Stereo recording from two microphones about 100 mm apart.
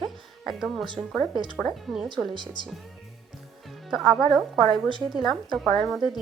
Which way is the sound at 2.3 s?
50° right (ahead or behind).